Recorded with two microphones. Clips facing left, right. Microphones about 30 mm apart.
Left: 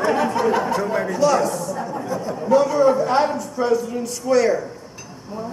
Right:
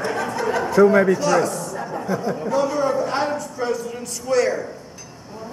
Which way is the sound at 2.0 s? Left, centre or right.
Right.